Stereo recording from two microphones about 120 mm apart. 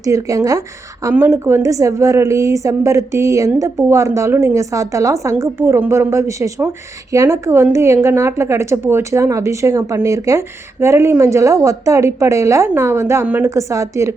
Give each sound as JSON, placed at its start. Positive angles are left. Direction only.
{"t": 0.0, "sound": "a woman's voice", "side_deg": -25}
{"t": 1.1, "sound": "a woman's voice", "side_deg": -20}
{"t": 13.5, "sound": "a woman's voice", "side_deg": -25}